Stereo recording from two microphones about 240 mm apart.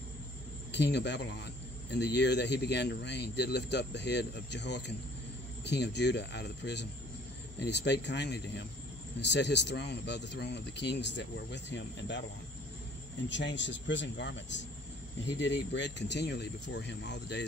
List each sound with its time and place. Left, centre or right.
0.7 s speech: left
13.3 s speech: left